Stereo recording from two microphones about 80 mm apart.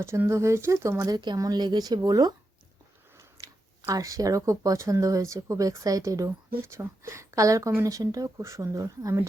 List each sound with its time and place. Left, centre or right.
0.3 s speech: right
1.1 s speech: right
1.4 s speech: right